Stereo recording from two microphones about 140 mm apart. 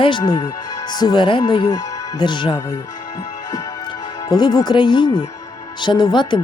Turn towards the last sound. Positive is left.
turn(degrees=35)  # may be behind; listen again after turning